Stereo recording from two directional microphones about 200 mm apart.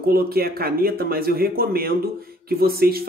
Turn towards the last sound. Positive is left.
turn(degrees=-50)  # may be behind; listen again after turning